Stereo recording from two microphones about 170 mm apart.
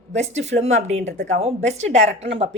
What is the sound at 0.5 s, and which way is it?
A woman's voice, 40° right (ahead or behind).